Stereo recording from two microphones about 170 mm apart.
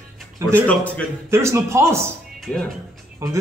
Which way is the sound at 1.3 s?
15° right (ahead or behind).